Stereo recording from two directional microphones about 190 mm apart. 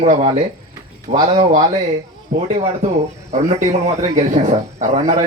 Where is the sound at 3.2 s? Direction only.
35° right (ahead or behind).